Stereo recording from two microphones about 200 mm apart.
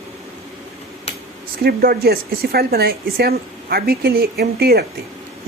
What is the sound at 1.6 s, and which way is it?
Speech, 50° right (ahead or behind).